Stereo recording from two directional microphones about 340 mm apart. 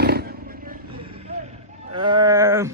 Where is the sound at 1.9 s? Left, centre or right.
Centre.